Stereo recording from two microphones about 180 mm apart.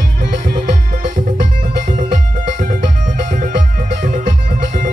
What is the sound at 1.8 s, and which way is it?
Music, 45° right (ahead or behind).